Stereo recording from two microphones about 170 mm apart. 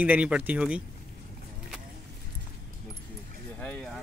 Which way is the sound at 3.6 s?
10° left (ahead or behind).